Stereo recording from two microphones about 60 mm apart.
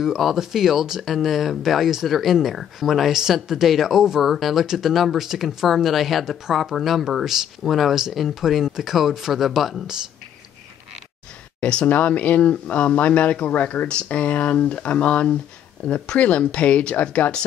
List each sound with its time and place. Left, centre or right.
0.0 s speech: centre
11.6 s speech: left